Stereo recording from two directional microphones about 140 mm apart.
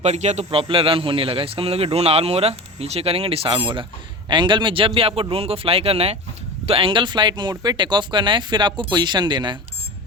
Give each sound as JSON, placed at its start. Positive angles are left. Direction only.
{"t": 0.0, "sound": "speech", "side_deg": -55}